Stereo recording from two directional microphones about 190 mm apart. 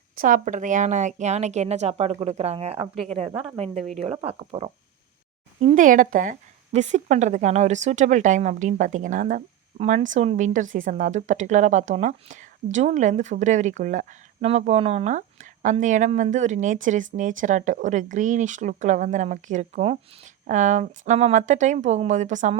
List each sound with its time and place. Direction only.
0.2 s speech: 45° right (ahead or behind)
3.3 s speech: 5° right (ahead or behind)
3.9 s speech: 30° right (ahead or behind)